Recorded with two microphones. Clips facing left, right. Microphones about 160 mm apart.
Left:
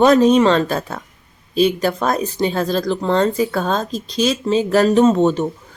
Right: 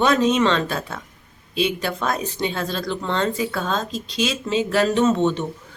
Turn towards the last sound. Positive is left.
turn(degrees=40)  # may be behind; listen again after turning